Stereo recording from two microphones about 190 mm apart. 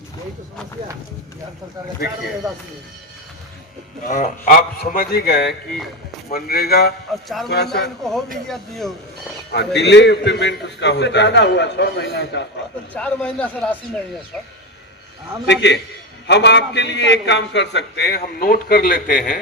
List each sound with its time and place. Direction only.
4.0 s a man's voice: 40° left (ahead or behind); by 7.9 s 60° left (ahead or behind)
8.4 s speech: centre (ahead or behind)
9.5 s a man's voice: 60° left (ahead or behind)
12.9 s a man's voice: 5° left (ahead or behind)
15.4 s a man's voice: 65° left (ahead or behind); by 19.4 s 45° left (ahead or behind)